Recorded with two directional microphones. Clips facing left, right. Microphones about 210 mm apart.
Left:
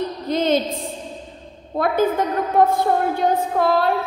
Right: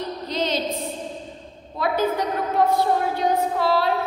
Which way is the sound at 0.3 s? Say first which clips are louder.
Left 7 dB; 50° left (ahead or behind).